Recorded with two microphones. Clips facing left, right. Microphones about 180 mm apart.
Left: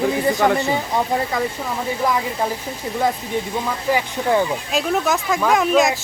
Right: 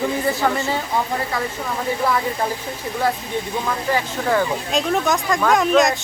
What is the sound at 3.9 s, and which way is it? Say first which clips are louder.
Speech: left 2 dB; 20° left (ahead or behind).